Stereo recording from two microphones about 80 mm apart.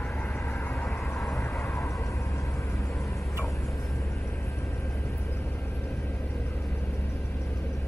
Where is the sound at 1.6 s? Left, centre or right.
Left.